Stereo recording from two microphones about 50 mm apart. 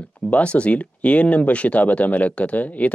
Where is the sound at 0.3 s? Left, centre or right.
Left.